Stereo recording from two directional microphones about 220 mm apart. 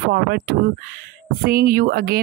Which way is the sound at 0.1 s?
45° right (ahead or behind).